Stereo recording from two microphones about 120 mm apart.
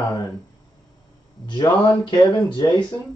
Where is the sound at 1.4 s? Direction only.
40° left (ahead or behind).